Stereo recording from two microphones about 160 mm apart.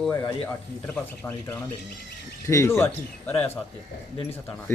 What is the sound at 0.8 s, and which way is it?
Speech, 10° left (ahead or behind).